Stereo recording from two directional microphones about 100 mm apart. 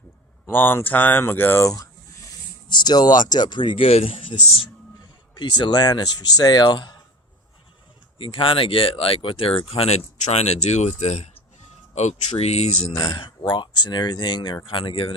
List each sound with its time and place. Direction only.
0.4 s speech: 20° left (ahead or behind)
1.6 s speech: 30° left (ahead or behind)
2.6 s speech: 45° left (ahead or behind)
3.8 s speech: 80° left
5.3 s speech: 50° left (ahead or behind)
8.2 s speech: 60° left (ahead or behind); by 11.3 s 90° left
12.4 s speech: 90° left
12.9 s speech: 40° left (ahead or behind); by 15.1 s 60° left (ahead or behind)